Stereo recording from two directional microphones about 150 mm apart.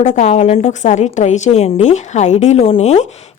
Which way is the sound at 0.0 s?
55° left (ahead or behind).